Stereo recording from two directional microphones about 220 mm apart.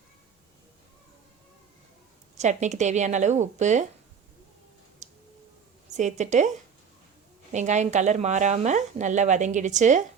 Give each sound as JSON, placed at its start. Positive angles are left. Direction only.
{"t": 2.4, "sound": "speech", "side_deg": -30}
{"t": 5.0, "sound": "tick", "side_deg": -30}
{"t": 5.9, "sound": "speech", "side_deg": -30}
{"t": 7.5, "sound": "speech", "side_deg": -35}